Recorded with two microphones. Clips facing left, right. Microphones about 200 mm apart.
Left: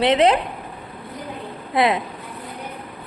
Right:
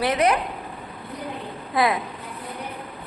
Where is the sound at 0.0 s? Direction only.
25° left (ahead or behind).